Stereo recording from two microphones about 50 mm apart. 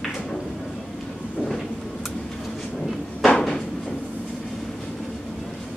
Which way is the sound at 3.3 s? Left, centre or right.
Centre.